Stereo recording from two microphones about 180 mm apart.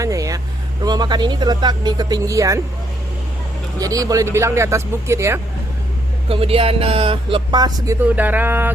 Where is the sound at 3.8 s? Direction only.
20° right (ahead or behind).